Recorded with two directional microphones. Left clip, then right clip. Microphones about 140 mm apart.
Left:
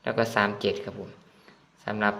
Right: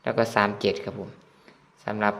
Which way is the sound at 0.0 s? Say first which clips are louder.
Right 2 dB; 20° right (ahead or behind).